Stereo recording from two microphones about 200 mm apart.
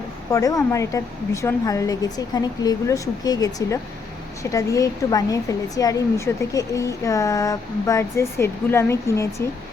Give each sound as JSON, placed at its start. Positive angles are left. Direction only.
{"t": 0.3, "sound": "speech", "side_deg": 15}